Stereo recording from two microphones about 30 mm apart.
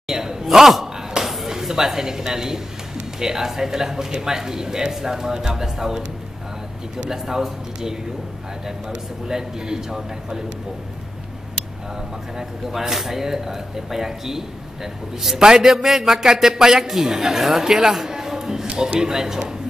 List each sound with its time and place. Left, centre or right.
0.1 s a sound: centre
1.5 s speech: centre
7.1 s speech: centre
12.7 s speech: centre
17.6 s a sound: centre
18.8 s speech: right